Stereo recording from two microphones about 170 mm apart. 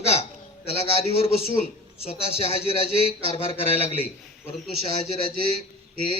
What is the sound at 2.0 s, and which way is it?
A man's voice, 35° left (ahead or behind).